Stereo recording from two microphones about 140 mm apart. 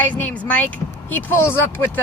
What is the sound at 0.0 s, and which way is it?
Speech, 10° left (ahead or behind).